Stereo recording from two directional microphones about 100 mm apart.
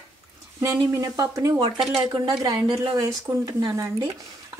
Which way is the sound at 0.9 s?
30° right (ahead or behind).